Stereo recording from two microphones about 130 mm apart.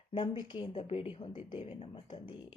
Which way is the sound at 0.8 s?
45° left (ahead or behind).